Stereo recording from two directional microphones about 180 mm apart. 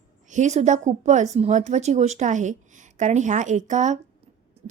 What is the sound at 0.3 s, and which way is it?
A woman's voice, 40° right (ahead or behind).